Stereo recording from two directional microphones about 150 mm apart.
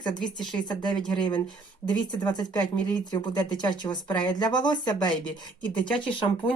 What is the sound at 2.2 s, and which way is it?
Speech, 25° left (ahead or behind).